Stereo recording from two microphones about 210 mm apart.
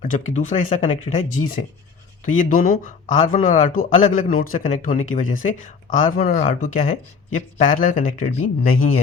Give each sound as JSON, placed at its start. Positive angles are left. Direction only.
{"t": 0.1, "sound": "speech", "side_deg": 35}